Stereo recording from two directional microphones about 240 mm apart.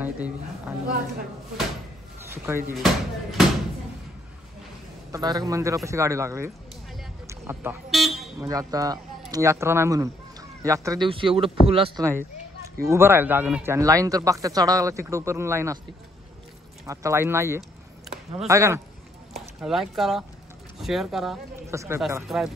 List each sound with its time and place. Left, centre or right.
0.0 s speech: centre
2.3 s speech: centre
2.7 s speech: centre
5.1 s speech: centre
7.2 s a sound: centre
7.9 s vehicle: centre
8.4 s speech: centre
12.8 s speech: centre
16.8 s speech: centre
19.6 s speech: centre
22.2 s speech: centre